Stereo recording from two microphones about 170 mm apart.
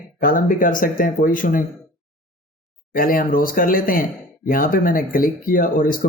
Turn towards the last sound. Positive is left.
turn(degrees=55)  # may be behind; listen again after turning